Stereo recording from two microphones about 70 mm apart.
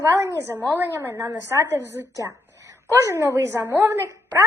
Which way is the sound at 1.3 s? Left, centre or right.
Right.